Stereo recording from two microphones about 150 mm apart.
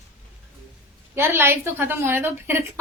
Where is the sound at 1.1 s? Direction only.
15° right (ahead or behind).